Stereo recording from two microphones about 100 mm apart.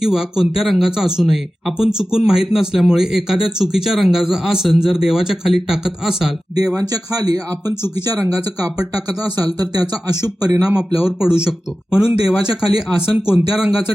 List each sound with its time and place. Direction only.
0.0 s speech: 5° right (ahead or behind)
6.7 s speech: 40° right (ahead or behind)
10.6 s speech: 5° right (ahead or behind)